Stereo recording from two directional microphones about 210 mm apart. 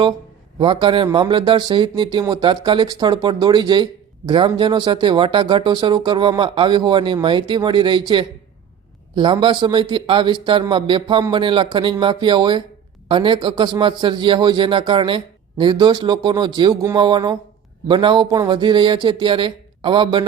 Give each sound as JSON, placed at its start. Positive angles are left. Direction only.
{"t": 0.6, "sound": "a man's voice", "side_deg": -25}